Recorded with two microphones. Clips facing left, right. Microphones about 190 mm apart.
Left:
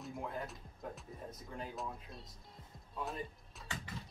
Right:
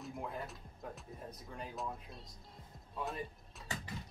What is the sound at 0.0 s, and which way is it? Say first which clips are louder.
Speech: left 1 dB; centre (ahead or behind).